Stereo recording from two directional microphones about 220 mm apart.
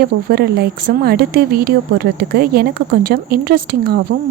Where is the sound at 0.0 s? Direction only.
45° right (ahead or behind).